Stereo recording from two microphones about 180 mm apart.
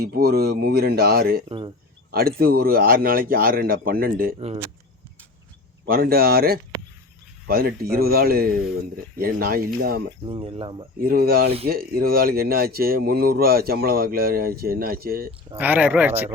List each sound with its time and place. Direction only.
0.0 s speech: 60° right (ahead or behind)
1.5 s speech: 25° right (ahead or behind)
2.1 s speech: 55° right (ahead or behind)
4.4 s speech: 30° right (ahead or behind)
5.8 s speech: 55° right (ahead or behind)
10.2 s speech: 30° right (ahead or behind)
11.0 s speech: 55° right (ahead or behind)
15.5 s speech: 10° right (ahead or behind)